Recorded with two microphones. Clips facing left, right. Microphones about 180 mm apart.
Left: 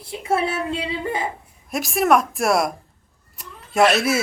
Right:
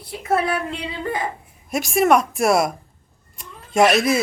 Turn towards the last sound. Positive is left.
turn(degrees=5)  # may be behind; listen again after turning